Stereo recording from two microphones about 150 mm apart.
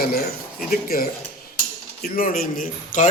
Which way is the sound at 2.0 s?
75° left (ahead or behind).